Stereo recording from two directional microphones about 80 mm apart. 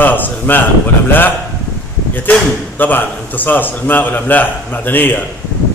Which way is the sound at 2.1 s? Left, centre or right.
Left.